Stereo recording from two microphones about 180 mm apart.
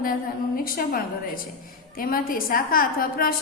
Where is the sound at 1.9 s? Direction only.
55° left (ahead or behind).